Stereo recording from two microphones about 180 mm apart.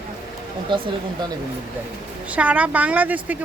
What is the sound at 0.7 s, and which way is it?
Speech, 25° right (ahead or behind).